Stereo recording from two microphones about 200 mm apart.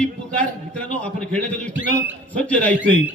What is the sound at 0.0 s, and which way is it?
A man's voice, 5° left (ahead or behind).